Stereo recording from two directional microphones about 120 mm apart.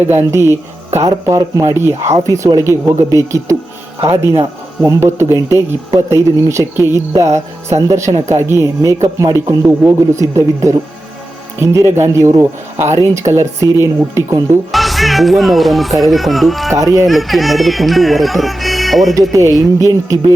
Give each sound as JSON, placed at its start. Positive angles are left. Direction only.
{"t": 0.0, "sound": "speech", "side_deg": -20}
{"t": 14.7, "sound": "speech", "side_deg": 0}
{"t": 16.7, "sound": "speech", "side_deg": -25}
{"t": 17.1, "sound": "speech", "side_deg": 0}
{"t": 19.3, "sound": "speech", "side_deg": -30}